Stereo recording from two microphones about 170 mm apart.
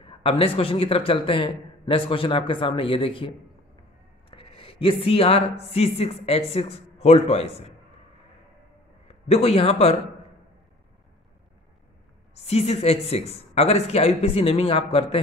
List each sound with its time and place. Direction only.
0.0 s a man's voice: 30° left (ahead or behind)
4.3 s speech: 35° left (ahead or behind)
9.0 s a man's voice: 40° left (ahead or behind)
12.4 s a man's voice: 40° left (ahead or behind)